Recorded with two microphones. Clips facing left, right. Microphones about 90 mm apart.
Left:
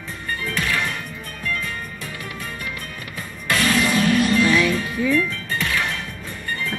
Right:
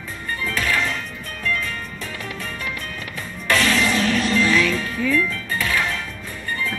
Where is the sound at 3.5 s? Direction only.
40° left (ahead or behind).